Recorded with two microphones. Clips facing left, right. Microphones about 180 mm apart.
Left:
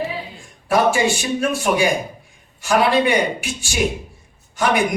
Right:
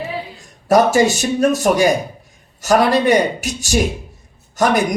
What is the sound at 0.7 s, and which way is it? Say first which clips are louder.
Speech: right 4 dB; 40° right (ahead or behind).